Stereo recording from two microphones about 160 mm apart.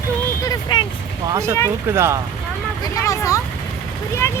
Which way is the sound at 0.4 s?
25° left (ahead or behind).